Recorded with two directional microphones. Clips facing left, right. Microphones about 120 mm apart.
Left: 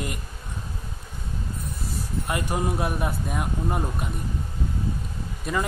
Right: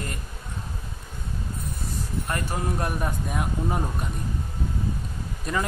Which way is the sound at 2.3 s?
15° left (ahead or behind).